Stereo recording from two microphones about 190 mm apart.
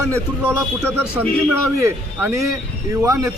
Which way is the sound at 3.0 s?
15° right (ahead or behind).